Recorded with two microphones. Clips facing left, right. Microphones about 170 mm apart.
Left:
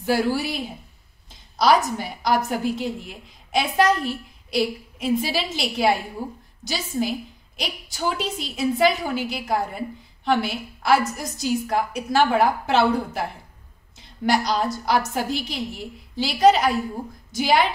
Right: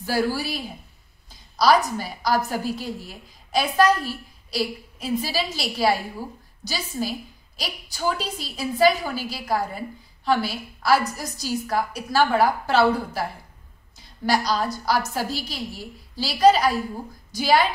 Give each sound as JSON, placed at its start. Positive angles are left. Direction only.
{"t": 0.0, "sound": "a woman's voice", "side_deg": 20}